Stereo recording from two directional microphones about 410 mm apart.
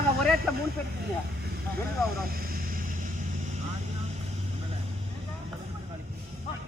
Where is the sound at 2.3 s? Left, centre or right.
Right.